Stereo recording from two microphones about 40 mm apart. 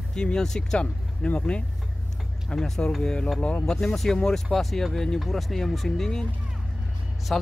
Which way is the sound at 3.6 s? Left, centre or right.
Centre.